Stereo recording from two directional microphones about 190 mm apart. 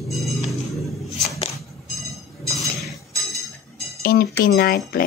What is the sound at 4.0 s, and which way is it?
Speech, 55° left (ahead or behind).